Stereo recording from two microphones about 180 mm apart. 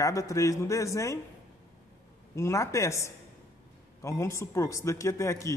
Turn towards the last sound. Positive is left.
turn(degrees=15)  # may be behind; listen again after turning